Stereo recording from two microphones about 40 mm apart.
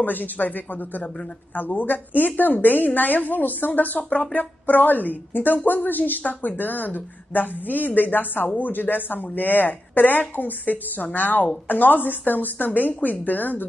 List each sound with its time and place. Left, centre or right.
0.0 s speech: left